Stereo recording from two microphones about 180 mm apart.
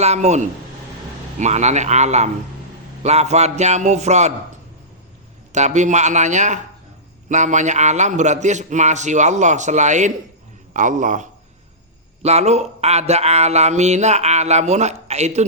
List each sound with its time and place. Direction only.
0.0 s speech: 40° right (ahead or behind)
5.5 s a man's voice: 40° right (ahead or behind)